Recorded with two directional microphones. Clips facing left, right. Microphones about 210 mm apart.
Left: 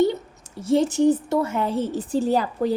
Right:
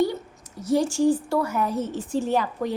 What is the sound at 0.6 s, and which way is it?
A woman's voice, 25° left (ahead or behind).